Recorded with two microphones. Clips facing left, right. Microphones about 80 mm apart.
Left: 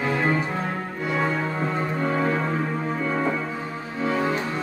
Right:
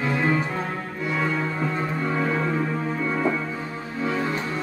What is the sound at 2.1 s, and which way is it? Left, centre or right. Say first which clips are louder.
Music: left 1 dB; left.